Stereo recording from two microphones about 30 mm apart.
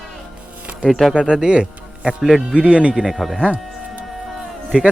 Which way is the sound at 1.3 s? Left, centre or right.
Right.